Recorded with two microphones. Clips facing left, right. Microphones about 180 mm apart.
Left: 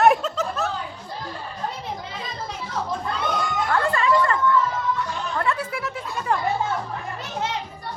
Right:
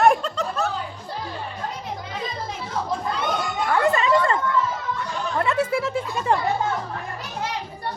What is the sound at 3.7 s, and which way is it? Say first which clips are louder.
Music: right 2 dB; 20° right (ahead or behind).